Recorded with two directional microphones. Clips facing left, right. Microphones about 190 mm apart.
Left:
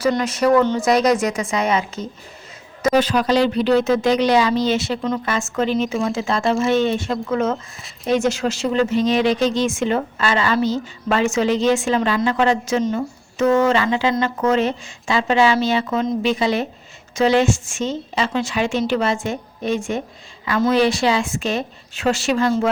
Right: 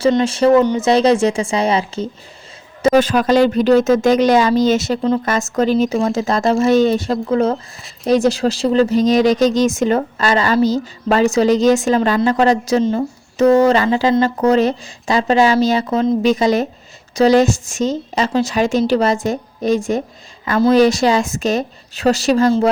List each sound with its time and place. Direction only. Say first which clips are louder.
0.0 s speech: right 5 dB; 25° right (ahead or behind)
0.6 s speech: right 3 dB; 15° right (ahead or behind)
0.9 s speech: right 4 dB; 30° right (ahead or behind)
2.9 s speech: right 3 dB; 50° right (ahead or behind)